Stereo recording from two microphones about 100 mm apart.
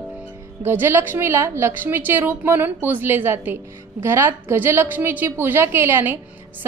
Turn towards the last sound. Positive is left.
turn(degrees=-25)  # may be behind; listen again after turning